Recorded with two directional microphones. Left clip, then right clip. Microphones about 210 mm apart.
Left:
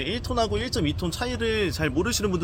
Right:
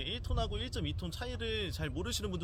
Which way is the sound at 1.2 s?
30° right (ahead or behind).